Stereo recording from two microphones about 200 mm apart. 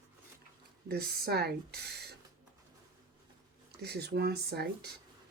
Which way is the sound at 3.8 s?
55° right (ahead or behind).